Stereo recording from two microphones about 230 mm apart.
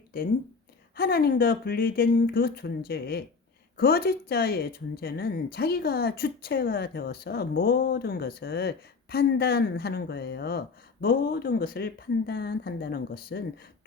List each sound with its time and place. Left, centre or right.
0.9 s speech: left